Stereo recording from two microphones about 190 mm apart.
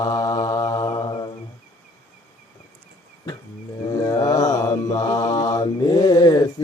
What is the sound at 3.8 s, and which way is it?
Mantra, 20° left (ahead or behind).